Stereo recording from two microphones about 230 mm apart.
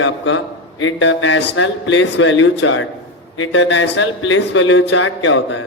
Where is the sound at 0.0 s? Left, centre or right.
Left.